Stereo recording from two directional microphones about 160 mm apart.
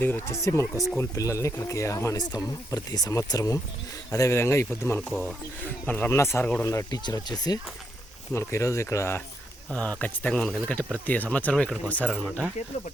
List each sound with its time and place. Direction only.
0.0 s speech: 15° left (ahead or behind)
4.9 s speech: centre (ahead or behind)